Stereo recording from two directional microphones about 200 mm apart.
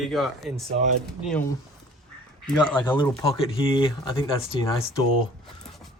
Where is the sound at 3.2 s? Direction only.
25° left (ahead or behind).